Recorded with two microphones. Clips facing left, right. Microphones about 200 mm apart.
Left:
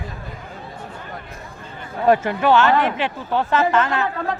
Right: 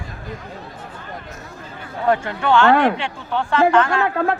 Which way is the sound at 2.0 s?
20° left (ahead or behind).